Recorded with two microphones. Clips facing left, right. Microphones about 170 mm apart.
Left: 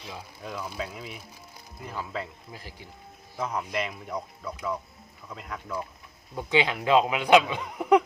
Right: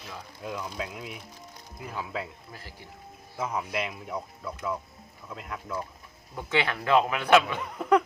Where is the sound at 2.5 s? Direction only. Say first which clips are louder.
Left 2 dB; 15° left (ahead or behind).